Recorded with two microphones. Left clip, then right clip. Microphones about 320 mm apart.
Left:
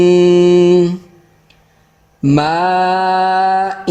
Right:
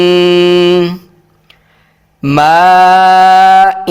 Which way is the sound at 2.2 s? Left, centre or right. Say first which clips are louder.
Right 7 dB; right.